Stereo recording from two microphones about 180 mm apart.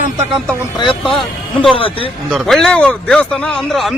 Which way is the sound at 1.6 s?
30° left (ahead or behind).